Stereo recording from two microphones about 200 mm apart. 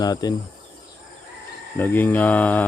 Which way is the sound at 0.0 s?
20° left (ahead or behind).